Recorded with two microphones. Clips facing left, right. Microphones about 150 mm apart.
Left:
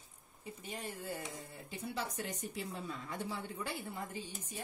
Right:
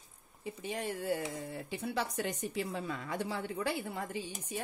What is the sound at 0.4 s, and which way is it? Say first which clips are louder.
Speech: right 7 dB; 90° right.